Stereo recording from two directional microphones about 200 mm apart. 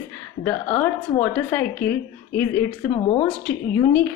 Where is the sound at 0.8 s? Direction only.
10° left (ahead or behind).